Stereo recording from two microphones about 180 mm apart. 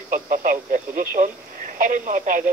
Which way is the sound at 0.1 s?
50° right (ahead or behind).